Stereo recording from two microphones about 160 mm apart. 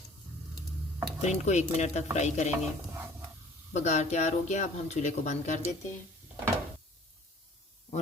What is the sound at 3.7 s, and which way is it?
Speech, 45° left (ahead or behind).